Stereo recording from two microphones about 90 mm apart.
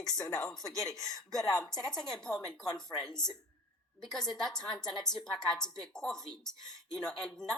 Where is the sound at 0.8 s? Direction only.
5° left (ahead or behind).